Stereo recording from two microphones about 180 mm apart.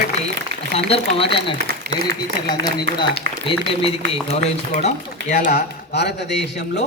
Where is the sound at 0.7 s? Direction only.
30° left (ahead or behind).